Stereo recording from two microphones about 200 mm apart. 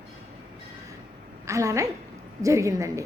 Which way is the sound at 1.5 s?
15° right (ahead or behind).